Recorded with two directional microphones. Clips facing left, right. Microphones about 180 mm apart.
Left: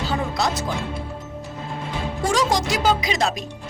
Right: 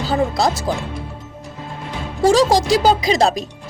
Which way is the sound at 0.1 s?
35° right (ahead or behind).